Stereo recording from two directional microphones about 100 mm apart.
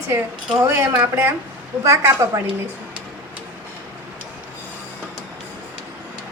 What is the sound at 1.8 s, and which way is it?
Speech, 30° right (ahead or behind).